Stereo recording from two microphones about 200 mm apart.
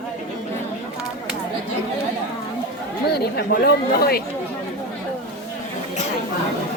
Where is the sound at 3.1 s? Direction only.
50° left (ahead or behind).